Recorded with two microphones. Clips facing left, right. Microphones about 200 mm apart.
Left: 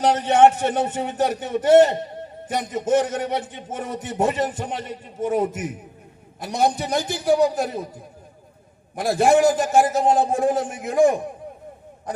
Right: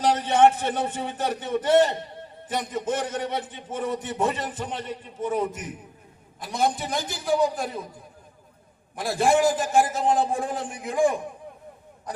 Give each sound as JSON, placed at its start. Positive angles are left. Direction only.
{"t": 0.0, "sound": "speech", "side_deg": 50}
{"t": 9.0, "sound": "speech", "side_deg": 45}